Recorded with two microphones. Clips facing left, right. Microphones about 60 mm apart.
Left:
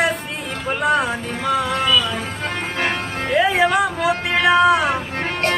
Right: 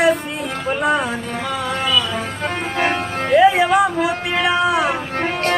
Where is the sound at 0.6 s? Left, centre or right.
Centre.